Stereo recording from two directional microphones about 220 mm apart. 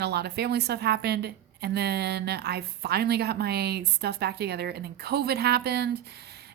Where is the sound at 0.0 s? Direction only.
45° right (ahead or behind).